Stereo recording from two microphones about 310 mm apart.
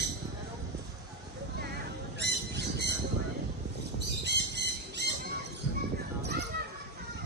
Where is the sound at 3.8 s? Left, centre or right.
Right.